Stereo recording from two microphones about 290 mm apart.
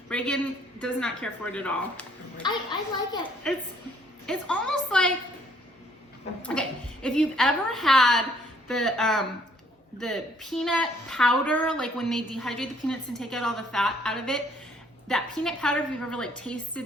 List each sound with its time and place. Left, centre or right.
0.1 s a sound: centre
0.8 s a woman's voice: centre
3.4 s a woman's voice: centre
6.4 s a woman's voice: centre